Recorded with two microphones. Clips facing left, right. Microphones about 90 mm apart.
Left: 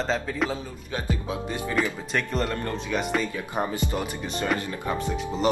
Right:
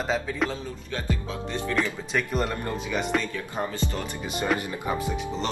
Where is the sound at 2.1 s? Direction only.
5° right (ahead or behind).